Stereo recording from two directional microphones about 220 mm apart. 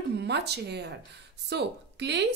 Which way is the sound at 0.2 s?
50° right (ahead or behind).